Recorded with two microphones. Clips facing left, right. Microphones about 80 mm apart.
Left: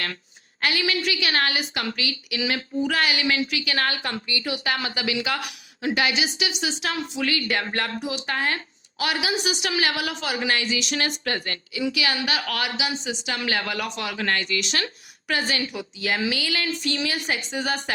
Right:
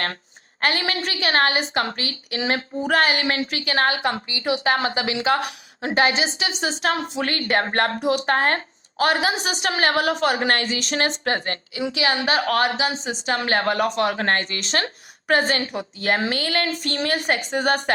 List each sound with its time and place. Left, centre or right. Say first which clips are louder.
0.6 s a woman's voice: right 1 dB; right
11.1 s a woman's voice: right 4 dB; right